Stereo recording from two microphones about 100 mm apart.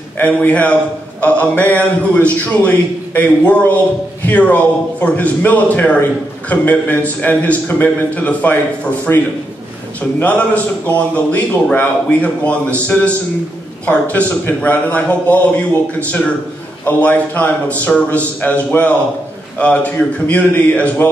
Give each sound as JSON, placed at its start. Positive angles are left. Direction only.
{"t": 0.2, "sound": "a man's voice", "side_deg": 15}
{"t": 16.8, "sound": "a man's voice", "side_deg": 20}